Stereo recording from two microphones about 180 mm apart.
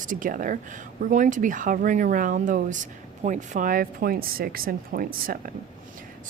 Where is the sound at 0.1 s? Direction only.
50° right (ahead or behind).